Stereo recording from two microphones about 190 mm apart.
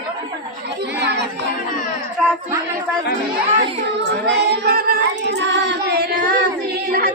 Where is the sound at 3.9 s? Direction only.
60° right (ahead or behind).